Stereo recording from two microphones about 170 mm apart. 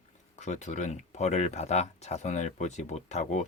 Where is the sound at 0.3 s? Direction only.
45° left (ahead or behind).